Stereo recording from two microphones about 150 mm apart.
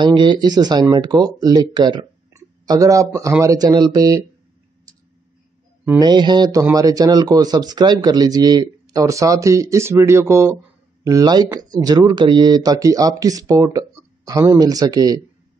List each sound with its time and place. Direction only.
0.0 s speech: 30° right (ahead or behind)
5.9 s speech: 25° right (ahead or behind)